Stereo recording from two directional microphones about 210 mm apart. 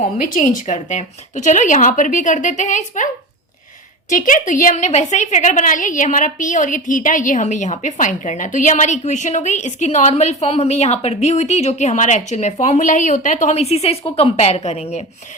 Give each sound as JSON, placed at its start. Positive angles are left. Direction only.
{"t": 0.2, "sound": "a woman's voice", "side_deg": 40}
{"t": 4.1, "sound": "a woman's voice", "side_deg": 40}